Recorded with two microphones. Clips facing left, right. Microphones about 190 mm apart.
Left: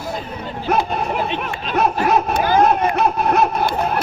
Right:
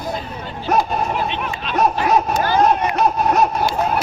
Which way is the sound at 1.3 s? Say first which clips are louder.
Left 1 dB; 45° left (ahead or behind).